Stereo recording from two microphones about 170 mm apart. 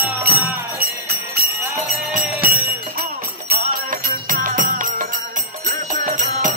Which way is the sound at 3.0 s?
65° right (ahead or behind).